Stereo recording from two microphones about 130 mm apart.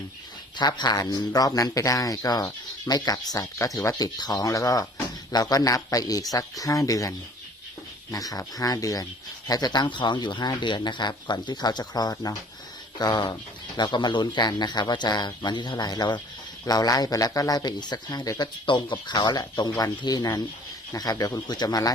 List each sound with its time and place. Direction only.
0.5 s speech: 35° left (ahead or behind)
8.1 s speech: 30° left (ahead or behind)